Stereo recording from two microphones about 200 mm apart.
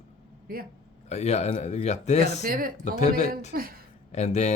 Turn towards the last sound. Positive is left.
turn(degrees=35)  # may be behind; listen again after turning